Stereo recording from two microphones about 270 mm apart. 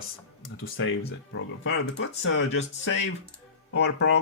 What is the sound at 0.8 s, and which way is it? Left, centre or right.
Speech, left.